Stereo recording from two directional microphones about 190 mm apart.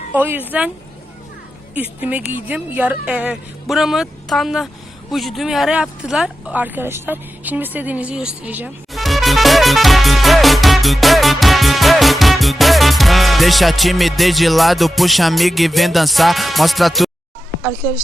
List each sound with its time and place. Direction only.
0.1 s speech: 10° right (ahead or behind)
1.7 s speech: 10° right (ahead or behind)